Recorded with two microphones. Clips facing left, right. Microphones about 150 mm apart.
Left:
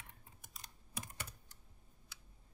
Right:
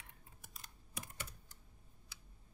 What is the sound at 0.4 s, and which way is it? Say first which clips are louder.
Typing: even; 5° right (ahead or behind).